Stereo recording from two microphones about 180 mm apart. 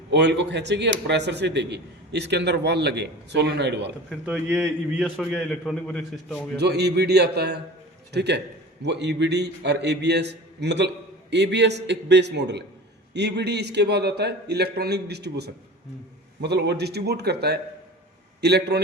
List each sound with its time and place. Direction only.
0.1 s a man's voice: 75° right (ahead or behind)
4.1 s a man's voice: centre (ahead or behind)
6.6 s a man's voice: 65° right (ahead or behind)